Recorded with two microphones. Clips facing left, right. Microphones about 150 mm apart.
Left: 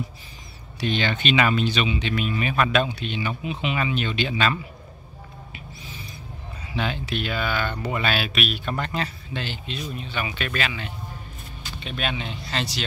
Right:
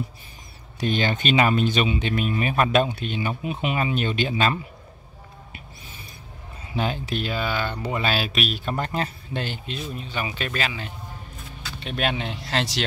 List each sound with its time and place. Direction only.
0.7 s speech: 45° right (ahead or behind)
6.7 s speech: 40° right (ahead or behind)
9.9 s speech: 35° right (ahead or behind)
11.9 s speech: 55° right (ahead or behind); by 12.8 s 75° right (ahead or behind)